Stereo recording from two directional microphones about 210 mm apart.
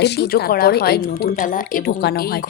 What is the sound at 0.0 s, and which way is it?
A woman's voice, 50° left (ahead or behind).